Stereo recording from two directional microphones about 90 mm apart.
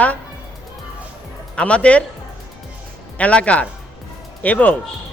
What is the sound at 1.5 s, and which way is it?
Speech, 10° left (ahead or behind).